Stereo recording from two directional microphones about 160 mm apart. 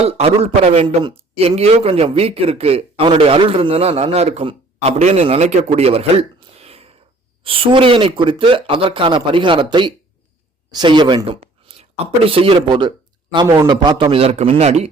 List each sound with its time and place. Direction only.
0.0 s a man's voice: 40° right (ahead or behind)
6.5 s a sound: 40° right (ahead or behind)
7.4 s a man's voice: 35° right (ahead or behind)